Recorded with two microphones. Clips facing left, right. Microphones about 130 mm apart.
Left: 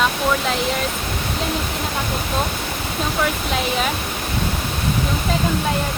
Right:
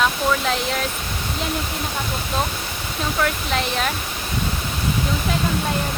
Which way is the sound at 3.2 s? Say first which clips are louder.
Even; 5° left (ahead or behind).